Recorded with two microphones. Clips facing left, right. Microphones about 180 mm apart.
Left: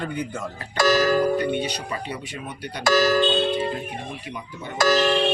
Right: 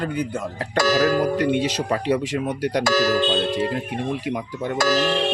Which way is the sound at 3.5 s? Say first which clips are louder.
Right 2 dB; 90° right.